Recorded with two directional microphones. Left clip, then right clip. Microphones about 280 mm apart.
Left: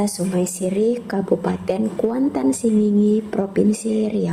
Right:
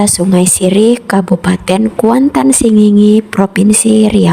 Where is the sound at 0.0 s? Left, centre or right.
Right.